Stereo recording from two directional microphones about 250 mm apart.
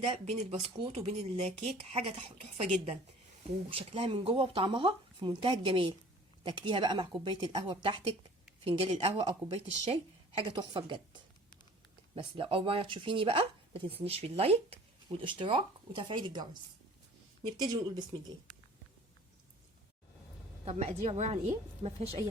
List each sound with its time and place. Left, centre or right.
0.0 s speech: right
17.6 s speech: centre
20.7 s speech: right